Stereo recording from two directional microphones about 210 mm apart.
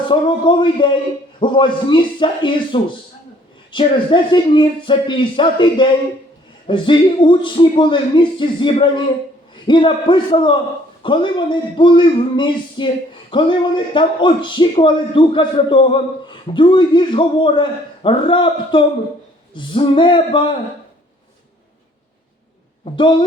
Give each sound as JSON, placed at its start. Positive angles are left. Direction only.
{"t": 0.1, "sound": "speech", "side_deg": 25}
{"t": 22.8, "sound": "speech", "side_deg": 25}